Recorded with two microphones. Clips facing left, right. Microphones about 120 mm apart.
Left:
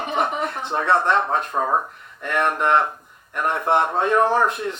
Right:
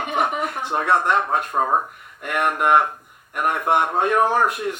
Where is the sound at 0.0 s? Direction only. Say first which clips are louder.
Even; 35° left (ahead or behind).